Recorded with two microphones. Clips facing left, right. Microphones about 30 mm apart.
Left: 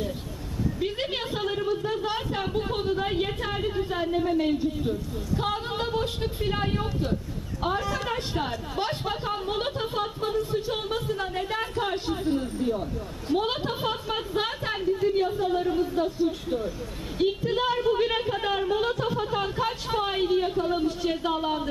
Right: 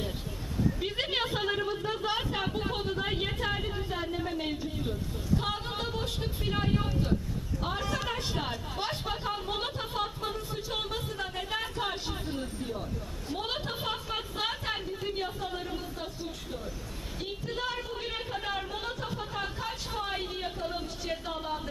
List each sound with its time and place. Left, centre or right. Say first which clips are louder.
0.8 s a sound: left 2 dB; centre
1.8 s a woman's voice: left 3 dB; centre
5.4 s a man's voice: left 5 dB; centre
11.8 s a woman's voice: left 6 dB; centre
21.2 s speech: left 10 dB; left